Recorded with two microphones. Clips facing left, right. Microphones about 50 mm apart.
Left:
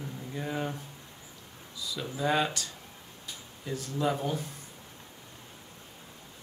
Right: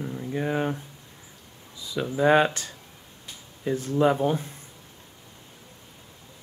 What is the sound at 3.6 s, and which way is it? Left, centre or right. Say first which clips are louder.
Speech: right 9 dB; right.